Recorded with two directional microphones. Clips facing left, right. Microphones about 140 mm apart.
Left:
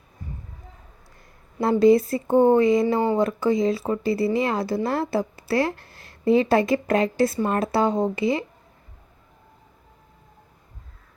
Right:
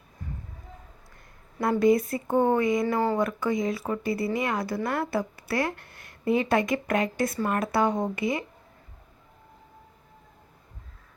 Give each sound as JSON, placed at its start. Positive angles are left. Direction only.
{"t": 1.5, "sound": "speech", "side_deg": 20}
{"t": 2.9, "sound": "speech", "side_deg": 15}
{"t": 3.2, "sound": "speech", "side_deg": 25}